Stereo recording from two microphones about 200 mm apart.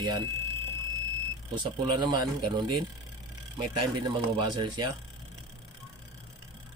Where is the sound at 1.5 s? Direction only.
25° right (ahead or behind).